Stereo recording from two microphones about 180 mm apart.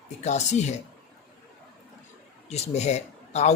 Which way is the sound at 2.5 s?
35° left (ahead or behind).